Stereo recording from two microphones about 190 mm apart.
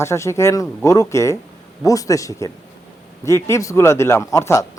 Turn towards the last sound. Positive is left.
turn(degrees=15)  # may be behind; listen again after turning